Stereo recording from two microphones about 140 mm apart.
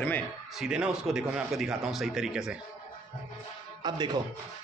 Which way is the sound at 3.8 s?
30° right (ahead or behind).